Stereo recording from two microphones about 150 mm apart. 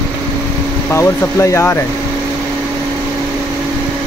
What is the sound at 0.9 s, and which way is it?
Speech, 20° left (ahead or behind).